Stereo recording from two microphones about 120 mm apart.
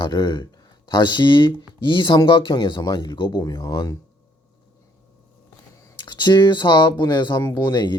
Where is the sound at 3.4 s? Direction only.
30° left (ahead or behind).